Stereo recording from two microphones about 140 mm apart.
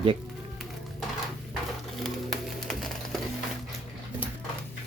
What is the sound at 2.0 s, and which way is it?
Music, centre (ahead or behind).